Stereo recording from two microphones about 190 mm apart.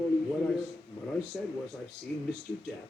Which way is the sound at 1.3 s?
Centre (ahead or behind).